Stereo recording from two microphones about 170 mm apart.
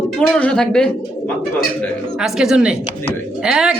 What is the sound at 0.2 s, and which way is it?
Speech, 5° left (ahead or behind).